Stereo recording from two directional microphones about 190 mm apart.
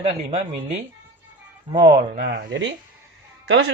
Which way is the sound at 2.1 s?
45° right (ahead or behind).